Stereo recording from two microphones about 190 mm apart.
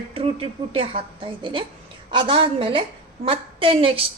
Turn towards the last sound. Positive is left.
turn(degrees=-30)  # may be behind; listen again after turning